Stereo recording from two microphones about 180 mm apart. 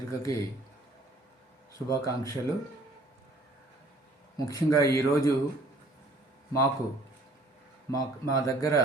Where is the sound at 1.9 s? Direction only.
20° left (ahead or behind).